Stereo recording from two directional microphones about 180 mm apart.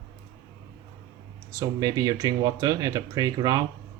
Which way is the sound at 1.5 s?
20° right (ahead or behind).